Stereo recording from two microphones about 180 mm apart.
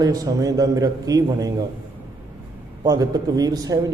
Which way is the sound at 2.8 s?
20° right (ahead or behind).